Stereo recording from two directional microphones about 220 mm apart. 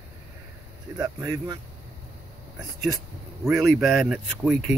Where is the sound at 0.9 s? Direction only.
15° right (ahead or behind).